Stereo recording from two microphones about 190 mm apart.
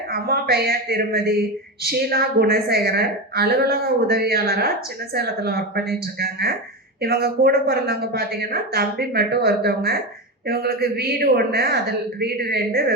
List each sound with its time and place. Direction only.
0.1 s a woman's voice: 55° right (ahead or behind)